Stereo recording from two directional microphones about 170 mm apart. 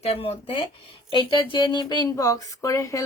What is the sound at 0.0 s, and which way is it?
A woman's voice, 35° left (ahead or behind).